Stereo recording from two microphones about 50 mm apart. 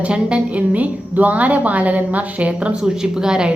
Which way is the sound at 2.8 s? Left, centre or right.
Centre.